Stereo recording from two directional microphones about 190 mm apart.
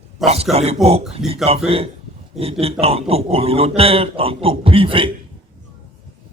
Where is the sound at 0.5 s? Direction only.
35° right (ahead or behind).